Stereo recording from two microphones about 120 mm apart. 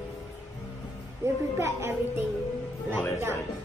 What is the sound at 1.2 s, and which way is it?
A child's voice, 20° right (ahead or behind).